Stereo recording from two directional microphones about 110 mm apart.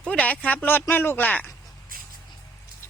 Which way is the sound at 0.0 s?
10° left (ahead or behind).